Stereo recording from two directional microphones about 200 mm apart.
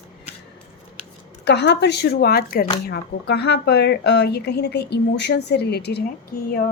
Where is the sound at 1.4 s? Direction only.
55° left (ahead or behind).